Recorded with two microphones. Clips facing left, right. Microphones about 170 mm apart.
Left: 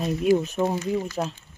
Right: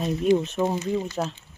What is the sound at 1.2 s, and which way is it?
Speech, centre (ahead or behind).